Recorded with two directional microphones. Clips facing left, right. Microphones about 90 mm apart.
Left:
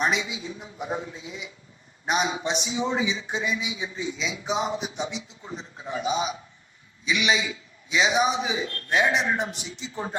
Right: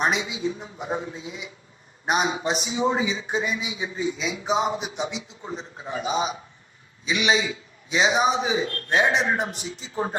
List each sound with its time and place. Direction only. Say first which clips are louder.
0.0 s a man's voice: right 2 dB; 40° right (ahead or behind)